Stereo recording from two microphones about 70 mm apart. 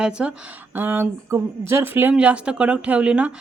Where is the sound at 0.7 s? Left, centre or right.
Right.